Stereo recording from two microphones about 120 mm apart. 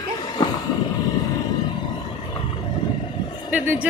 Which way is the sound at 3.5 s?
15° right (ahead or behind).